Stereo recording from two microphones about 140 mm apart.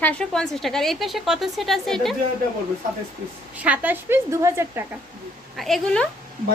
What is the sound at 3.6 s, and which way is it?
A woman's voice, 10° right (ahead or behind).